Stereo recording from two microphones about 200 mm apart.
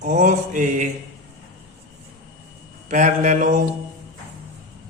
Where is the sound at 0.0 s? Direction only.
40° right (ahead or behind).